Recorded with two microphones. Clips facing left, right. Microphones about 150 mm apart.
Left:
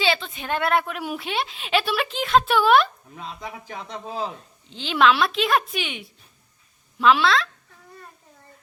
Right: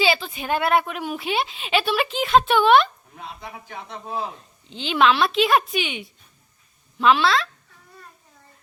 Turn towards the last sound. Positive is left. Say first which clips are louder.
# even
turn(degrees=0)  # may be behind; listen again after turning